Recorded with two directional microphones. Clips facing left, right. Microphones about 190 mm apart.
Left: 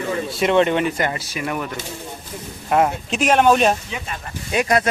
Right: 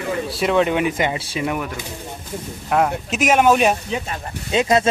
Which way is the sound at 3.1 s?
10° right (ahead or behind).